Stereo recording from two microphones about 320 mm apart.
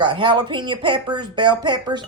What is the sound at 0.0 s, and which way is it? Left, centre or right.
Speech, centre.